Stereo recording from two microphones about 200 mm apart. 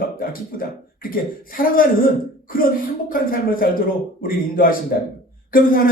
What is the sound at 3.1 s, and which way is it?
A man's voice, 45° left (ahead or behind).